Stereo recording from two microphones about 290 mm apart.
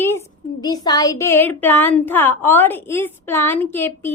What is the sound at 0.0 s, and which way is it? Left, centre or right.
A woman's voice, centre.